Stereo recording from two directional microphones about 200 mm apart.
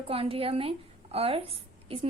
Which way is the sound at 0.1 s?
30° right (ahead or behind).